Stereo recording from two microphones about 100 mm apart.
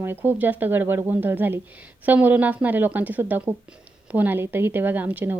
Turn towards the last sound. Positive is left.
turn(degrees=-15)  # may be behind; listen again after turning